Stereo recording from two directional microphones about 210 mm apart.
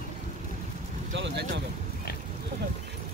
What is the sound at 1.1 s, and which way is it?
Speech, 55° right (ahead or behind).